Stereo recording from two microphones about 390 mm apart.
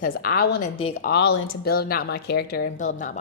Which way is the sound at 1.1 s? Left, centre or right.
Left.